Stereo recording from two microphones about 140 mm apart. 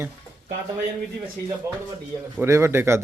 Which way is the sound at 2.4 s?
20° right (ahead or behind).